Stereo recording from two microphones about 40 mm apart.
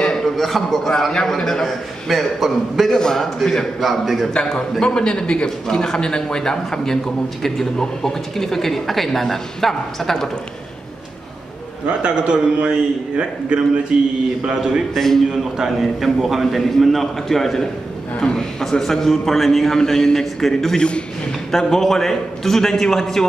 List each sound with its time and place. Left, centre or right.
0.2 s a man's voice: centre
3.0 s a man's voice: centre
4.3 s a man's voice: centre
12.0 s a man's voice: right
14.4 s a man's voice: centre
15.0 s a man's voice: centre
20.7 s a man's voice: left
21.5 s speech: centre